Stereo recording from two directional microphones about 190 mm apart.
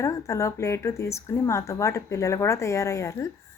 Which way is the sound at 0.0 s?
15° left (ahead or behind).